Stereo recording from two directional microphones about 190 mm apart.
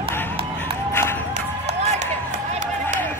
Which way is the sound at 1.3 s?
35° right (ahead or behind).